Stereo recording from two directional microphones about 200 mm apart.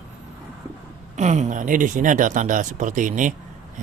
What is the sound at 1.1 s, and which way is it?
Speech, 35° right (ahead or behind).